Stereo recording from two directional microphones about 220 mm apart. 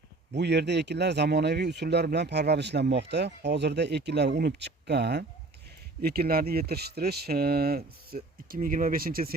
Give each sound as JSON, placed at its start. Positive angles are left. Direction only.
{"t": 0.3, "sound": "speech", "side_deg": -50}